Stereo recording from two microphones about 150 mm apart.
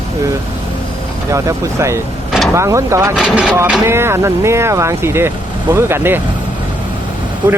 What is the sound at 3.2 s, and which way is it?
Speech, 5° right (ahead or behind).